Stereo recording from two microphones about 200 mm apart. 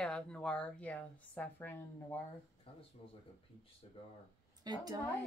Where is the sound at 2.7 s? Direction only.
25° left (ahead or behind).